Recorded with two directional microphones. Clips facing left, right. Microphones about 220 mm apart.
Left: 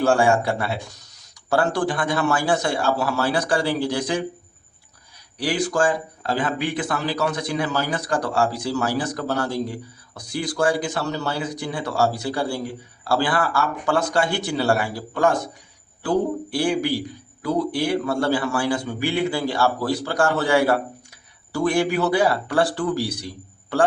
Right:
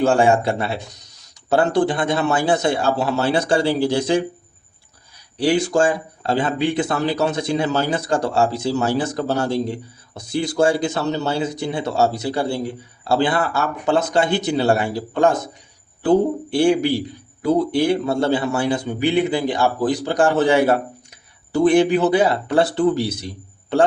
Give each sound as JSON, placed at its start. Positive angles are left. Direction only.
{"t": 0.0, "sound": "a man's voice", "side_deg": -20}
{"t": 5.4, "sound": "a man's voice", "side_deg": -25}